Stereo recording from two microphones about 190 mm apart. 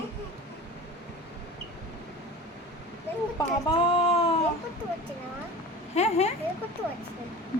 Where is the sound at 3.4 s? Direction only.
20° left (ahead or behind).